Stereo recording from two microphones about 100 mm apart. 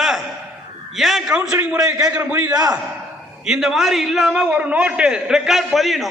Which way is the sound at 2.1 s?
20° right (ahead or behind).